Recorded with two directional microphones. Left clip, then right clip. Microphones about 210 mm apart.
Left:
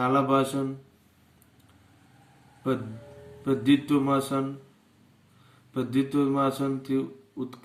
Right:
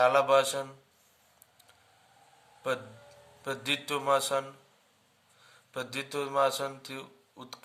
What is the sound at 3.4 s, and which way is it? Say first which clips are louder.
Speech: left 8 dB; 50° right (ahead or behind).